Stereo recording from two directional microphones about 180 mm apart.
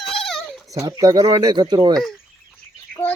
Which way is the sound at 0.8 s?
20° right (ahead or behind).